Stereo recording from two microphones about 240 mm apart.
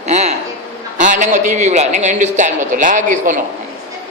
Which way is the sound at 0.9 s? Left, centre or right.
Right.